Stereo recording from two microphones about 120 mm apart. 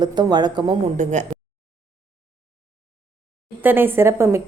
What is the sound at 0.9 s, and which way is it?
Speech, 75° right (ahead or behind).